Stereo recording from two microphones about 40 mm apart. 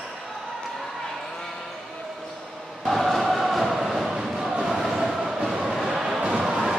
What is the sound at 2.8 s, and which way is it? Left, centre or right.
Chant, centre.